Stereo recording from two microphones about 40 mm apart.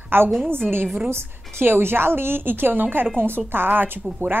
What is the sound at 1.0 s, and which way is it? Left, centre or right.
A woman's voice, right.